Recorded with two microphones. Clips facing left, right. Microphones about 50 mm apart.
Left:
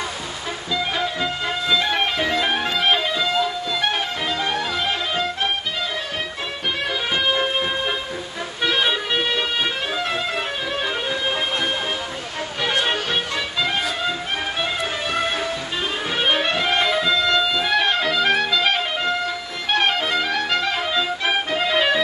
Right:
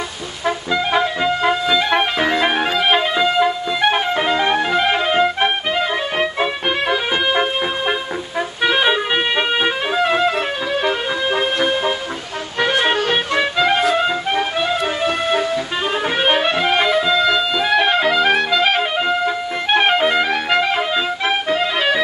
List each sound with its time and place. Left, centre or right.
0.9 s music: right
15.0 s music: right
16.3 s music: centre
21.5 s music: centre